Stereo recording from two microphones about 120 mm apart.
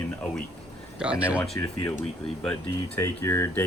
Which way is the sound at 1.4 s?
15° left (ahead or behind).